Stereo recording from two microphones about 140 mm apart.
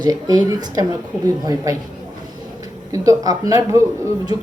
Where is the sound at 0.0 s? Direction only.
30° right (ahead or behind).